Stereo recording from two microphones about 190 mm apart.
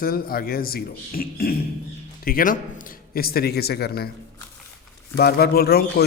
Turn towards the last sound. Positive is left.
turn(degrees=55)  # may be behind; listen again after turning